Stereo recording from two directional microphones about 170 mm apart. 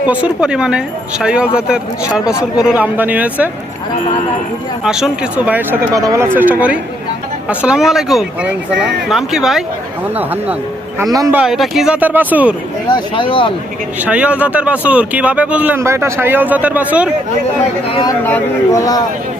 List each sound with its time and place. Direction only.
0.1 s speech: 5° right (ahead or behind)
4.8 s speech: 5° right (ahead or behind)
11.1 s speech: 20° right (ahead or behind)
11.3 s speech: centre (ahead or behind)
12.9 s speech: 30° left (ahead or behind)
14.0 s speech: 5° right (ahead or behind)
18.3 s speech: 15° left (ahead or behind)